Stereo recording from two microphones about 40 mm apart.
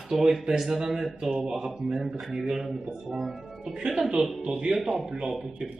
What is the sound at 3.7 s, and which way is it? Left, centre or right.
Speech, centre.